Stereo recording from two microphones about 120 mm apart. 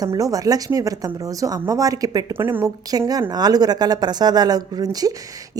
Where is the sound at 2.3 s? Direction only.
20° right (ahead or behind).